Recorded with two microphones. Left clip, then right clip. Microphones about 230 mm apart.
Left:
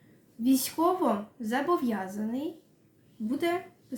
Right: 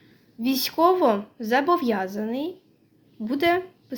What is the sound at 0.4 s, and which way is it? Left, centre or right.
A woman's voice, right.